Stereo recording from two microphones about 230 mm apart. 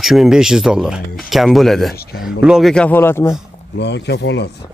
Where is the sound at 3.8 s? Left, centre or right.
Left.